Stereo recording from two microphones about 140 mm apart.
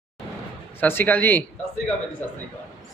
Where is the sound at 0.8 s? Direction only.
15° left (ahead or behind).